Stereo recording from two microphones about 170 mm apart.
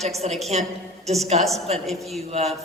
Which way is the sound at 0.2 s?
45° right (ahead or behind).